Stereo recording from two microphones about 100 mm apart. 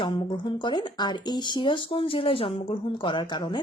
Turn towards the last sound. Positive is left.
turn(degrees=50)  # may be behind; listen again after turning